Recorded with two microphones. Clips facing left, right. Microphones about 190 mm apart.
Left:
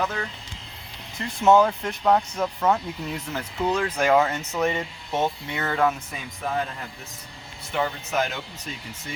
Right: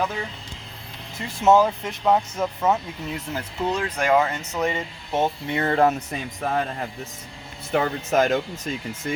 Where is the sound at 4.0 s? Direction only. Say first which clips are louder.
Even; 5° left (ahead or behind).